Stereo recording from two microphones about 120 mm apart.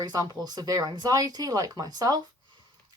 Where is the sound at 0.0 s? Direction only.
35° right (ahead or behind).